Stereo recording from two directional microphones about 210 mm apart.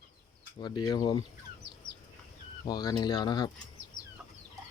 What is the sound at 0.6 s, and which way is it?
Speech, 20° left (ahead or behind).